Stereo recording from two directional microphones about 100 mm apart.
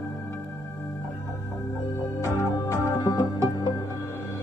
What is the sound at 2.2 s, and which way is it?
Music, 35° left (ahead or behind).